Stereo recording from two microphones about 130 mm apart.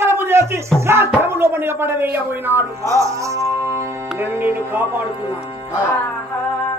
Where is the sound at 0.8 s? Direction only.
20° right (ahead or behind).